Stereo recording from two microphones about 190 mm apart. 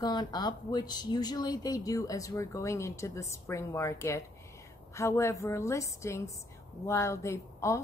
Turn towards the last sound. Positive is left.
turn(degrees=15)  # may be behind; listen again after turning